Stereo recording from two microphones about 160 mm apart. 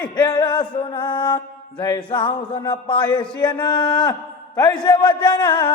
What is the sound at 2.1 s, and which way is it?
Music, 30° left (ahead or behind).